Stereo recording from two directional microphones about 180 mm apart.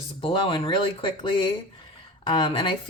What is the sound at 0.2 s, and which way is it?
Speech, 30° left (ahead or behind).